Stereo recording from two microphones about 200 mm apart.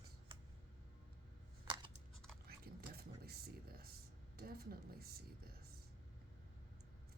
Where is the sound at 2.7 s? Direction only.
50° right (ahead or behind).